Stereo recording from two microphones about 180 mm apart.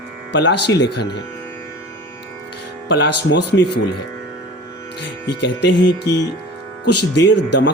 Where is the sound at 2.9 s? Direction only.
75° left (ahead or behind).